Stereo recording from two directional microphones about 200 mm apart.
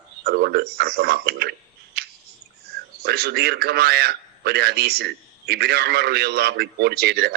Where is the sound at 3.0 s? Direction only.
55° right (ahead or behind).